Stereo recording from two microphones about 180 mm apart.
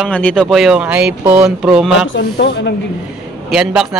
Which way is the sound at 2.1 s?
75° left (ahead or behind).